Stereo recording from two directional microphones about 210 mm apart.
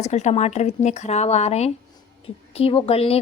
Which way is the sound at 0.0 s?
30° left (ahead or behind).